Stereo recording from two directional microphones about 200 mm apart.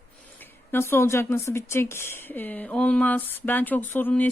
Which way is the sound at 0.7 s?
10° left (ahead or behind).